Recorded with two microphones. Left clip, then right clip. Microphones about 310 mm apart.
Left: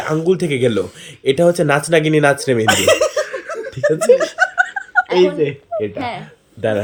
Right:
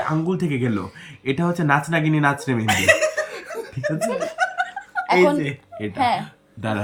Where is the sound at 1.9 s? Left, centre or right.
Centre.